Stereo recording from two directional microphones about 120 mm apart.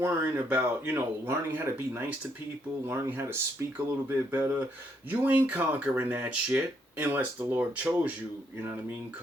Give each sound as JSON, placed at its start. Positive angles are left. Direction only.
{"t": 0.0, "sound": "speech", "side_deg": -15}